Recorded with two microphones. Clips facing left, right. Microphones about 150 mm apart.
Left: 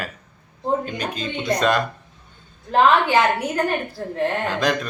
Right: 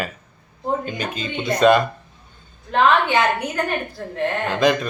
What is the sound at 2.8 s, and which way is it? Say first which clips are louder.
Speech: left 1 dB; 5° left (ahead or behind).